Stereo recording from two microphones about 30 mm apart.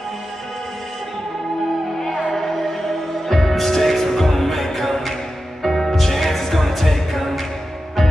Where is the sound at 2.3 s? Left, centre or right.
Centre.